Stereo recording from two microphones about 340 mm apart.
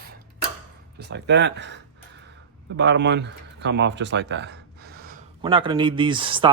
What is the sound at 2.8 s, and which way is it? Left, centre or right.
Speech, right.